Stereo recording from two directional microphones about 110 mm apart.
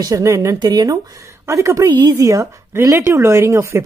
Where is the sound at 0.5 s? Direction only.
35° right (ahead or behind).